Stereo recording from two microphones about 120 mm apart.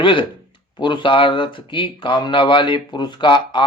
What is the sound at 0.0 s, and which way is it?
Speech, 45° left (ahead or behind).